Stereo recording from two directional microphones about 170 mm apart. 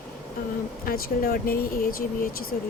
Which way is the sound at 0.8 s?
60° left (ahead or behind).